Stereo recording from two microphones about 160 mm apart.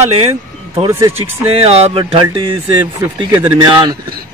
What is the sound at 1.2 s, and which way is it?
Speech, 35° right (ahead or behind).